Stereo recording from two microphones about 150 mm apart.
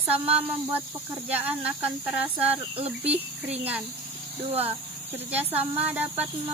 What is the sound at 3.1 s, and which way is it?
Speech, 45° right (ahead or behind).